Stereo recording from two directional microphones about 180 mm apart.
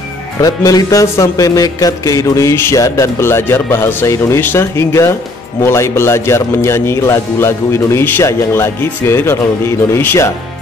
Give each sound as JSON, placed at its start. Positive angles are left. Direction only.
{"t": 0.4, "sound": "speech", "side_deg": 20}